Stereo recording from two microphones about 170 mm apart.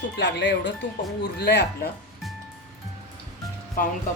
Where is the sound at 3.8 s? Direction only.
55° left (ahead or behind).